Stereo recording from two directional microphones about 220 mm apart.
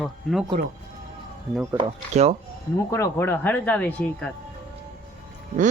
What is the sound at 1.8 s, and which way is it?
Speech, 30° right (ahead or behind).